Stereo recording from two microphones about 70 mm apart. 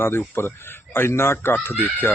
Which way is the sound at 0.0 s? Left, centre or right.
Left.